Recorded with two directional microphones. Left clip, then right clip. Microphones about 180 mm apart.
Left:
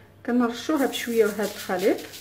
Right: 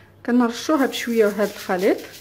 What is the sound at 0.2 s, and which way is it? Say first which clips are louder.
Speech: right 4 dB; 30° right (ahead or behind).